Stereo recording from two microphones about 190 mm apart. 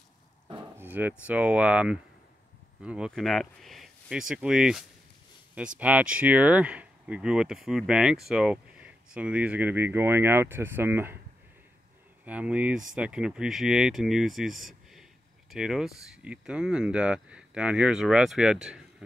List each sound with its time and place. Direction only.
0.7 s speech: 10° right (ahead or behind)
12.3 s speech: 5° right (ahead or behind)